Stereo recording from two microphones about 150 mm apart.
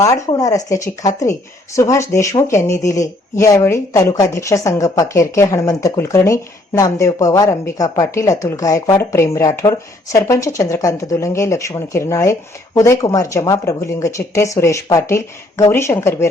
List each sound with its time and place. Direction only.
0.0 s speech: 20° left (ahead or behind)